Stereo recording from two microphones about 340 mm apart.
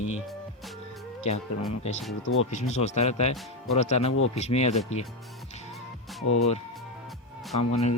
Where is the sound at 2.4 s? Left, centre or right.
Centre.